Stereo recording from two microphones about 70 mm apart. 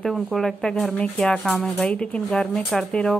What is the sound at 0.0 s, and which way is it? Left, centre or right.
Speech, centre.